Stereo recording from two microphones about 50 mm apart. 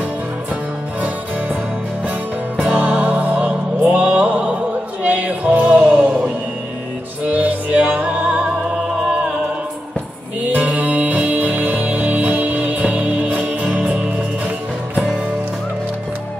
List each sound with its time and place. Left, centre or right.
2.6 s music: right
5.0 s male singing: right
7.4 s music: right
8.6 s music: centre
10.4 s music: right
13.7 s music: centre